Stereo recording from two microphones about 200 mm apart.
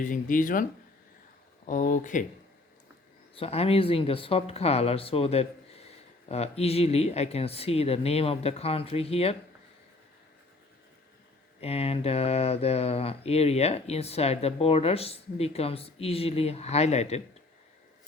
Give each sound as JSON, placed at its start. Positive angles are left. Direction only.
{"t": 0.0, "sound": "speech", "side_deg": 40}
{"t": 1.6, "sound": "speech", "side_deg": 40}
{"t": 3.3, "sound": "speech", "side_deg": 30}
{"t": 11.6, "sound": "speech", "side_deg": 30}